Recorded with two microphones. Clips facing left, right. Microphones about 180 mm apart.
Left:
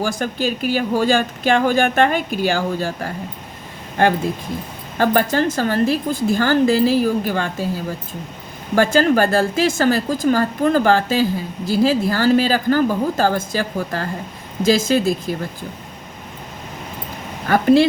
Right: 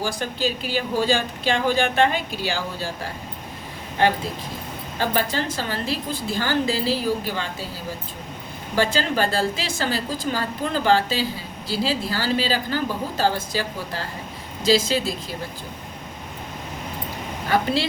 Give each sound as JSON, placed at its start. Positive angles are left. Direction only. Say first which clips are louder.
{"t": 0.0, "sound": "a woman's voice", "louder": "left 4 dB", "side_deg": 50}
{"t": 8.7, "sound": "a woman's voice", "louder": "left 7 dB", "side_deg": 50}
{"t": 17.5, "sound": "a woman's voice", "louder": "left 9 dB", "side_deg": 50}